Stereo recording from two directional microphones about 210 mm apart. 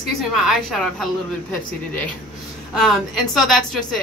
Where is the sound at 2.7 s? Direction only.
Centre (ahead or behind).